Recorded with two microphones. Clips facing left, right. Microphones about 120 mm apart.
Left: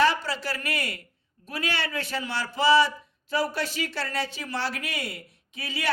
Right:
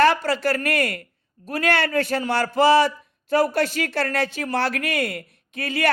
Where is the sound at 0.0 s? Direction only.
55° right (ahead or behind).